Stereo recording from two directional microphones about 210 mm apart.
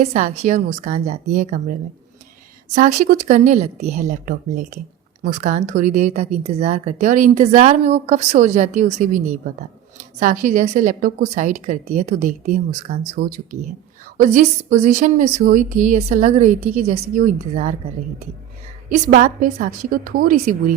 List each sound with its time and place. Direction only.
0.0 s a woman's voice: 30° right (ahead or behind)
2.7 s a woman's voice: 35° right (ahead or behind)
14.2 s a woman's voice: 35° right (ahead or behind)